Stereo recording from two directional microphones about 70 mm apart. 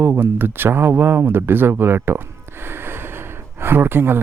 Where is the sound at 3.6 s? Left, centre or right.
Right.